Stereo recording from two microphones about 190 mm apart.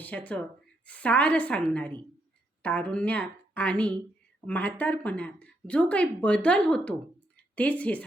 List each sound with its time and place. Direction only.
0.0 s a woman's voice: 10° left (ahead or behind)